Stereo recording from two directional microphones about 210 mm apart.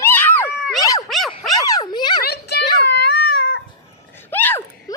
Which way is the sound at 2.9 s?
50° left (ahead or behind).